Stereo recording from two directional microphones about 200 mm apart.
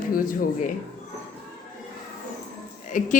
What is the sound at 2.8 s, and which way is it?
Speech, 40° left (ahead or behind).